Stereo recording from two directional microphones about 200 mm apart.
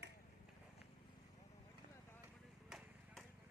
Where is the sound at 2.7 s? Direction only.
Centre (ahead or behind).